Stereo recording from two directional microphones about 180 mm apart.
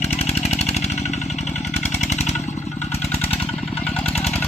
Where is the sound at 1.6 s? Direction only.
40° left (ahead or behind).